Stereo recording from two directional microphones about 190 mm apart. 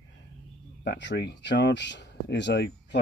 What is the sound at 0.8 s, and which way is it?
Speech, 65° left (ahead or behind).